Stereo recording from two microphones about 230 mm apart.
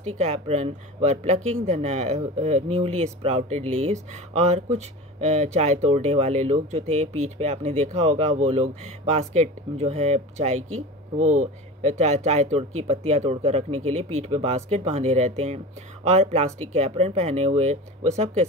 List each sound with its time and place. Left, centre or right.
0.2 s speech: right